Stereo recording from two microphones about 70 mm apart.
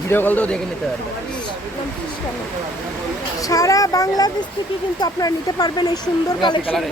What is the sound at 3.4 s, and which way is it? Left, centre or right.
Speech, left.